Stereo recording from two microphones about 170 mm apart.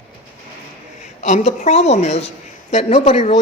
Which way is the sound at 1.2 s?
40° left (ahead or behind).